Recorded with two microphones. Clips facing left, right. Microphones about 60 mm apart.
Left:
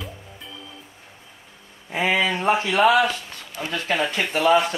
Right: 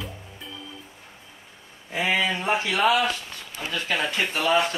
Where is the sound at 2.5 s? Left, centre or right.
Left.